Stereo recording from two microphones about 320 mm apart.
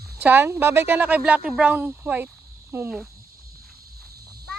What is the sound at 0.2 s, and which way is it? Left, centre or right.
Speech, centre.